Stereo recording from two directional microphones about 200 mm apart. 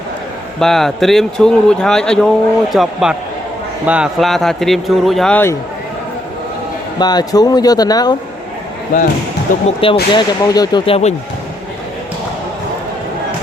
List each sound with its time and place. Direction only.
0.6 s speech: centre (ahead or behind)
7.0 s speech: 20° left (ahead or behind)
9.6 s speech: 25° left (ahead or behind)